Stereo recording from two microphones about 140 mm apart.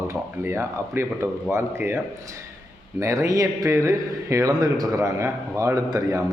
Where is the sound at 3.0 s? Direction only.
20° right (ahead or behind).